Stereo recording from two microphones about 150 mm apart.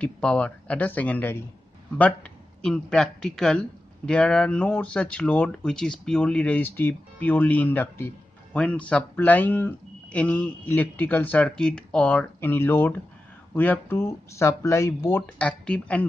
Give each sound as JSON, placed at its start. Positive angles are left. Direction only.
{"t": 0.0, "sound": "a man's voice", "side_deg": 10}
{"t": 2.6, "sound": "a man's voice", "side_deg": 5}